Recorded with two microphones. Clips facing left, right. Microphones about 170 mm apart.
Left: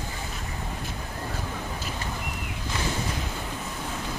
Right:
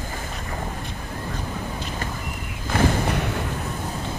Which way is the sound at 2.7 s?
60° right (ahead or behind).